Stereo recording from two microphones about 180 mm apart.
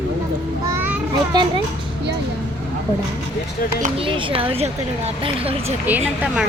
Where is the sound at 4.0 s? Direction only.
30° right (ahead or behind).